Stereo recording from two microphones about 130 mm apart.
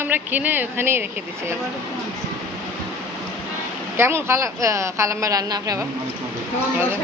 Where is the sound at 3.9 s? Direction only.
20° right (ahead or behind).